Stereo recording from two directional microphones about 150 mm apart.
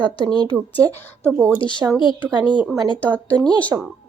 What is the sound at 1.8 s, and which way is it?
Speech, 15° right (ahead or behind).